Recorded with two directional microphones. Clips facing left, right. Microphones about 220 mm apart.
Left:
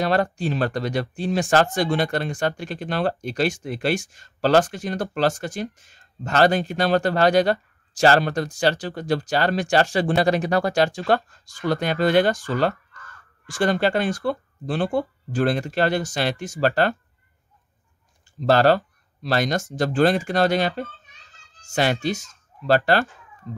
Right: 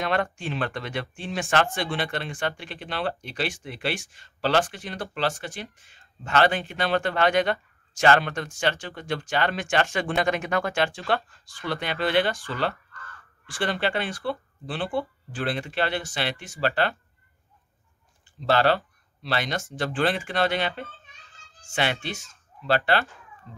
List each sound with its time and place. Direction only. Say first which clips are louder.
0.0 s speech: left 5 dB; 35° left (ahead or behind)
18.4 s speech: left 5 dB; 45° left (ahead or behind)